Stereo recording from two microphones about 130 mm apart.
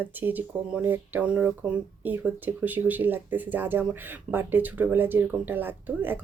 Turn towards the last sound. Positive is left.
turn(degrees=-15)  # may be behind; listen again after turning